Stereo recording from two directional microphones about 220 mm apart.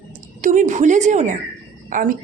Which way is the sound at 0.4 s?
35° right (ahead or behind).